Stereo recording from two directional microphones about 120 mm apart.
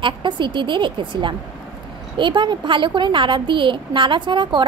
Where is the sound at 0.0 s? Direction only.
40° right (ahead or behind).